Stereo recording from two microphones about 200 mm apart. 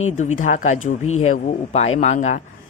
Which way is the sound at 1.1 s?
90° left.